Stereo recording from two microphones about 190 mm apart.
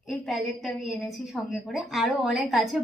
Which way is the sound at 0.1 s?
Centre (ahead or behind).